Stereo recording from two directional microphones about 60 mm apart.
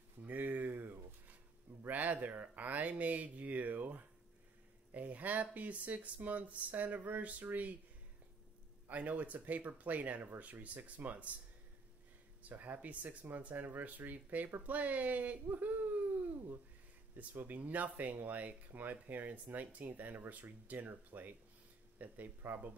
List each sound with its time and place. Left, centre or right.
0.3 s a sound: right
1.8 s speech: right
8.8 s speech: right
12.4 s speech: right